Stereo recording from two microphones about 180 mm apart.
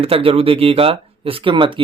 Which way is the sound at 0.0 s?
30° right (ahead or behind).